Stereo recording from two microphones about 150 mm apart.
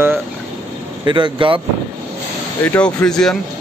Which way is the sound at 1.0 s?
30° right (ahead or behind).